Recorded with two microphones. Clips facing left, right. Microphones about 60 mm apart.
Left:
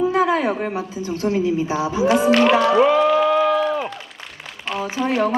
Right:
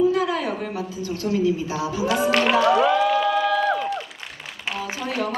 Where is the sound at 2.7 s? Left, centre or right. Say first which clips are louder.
Left 4 dB; left.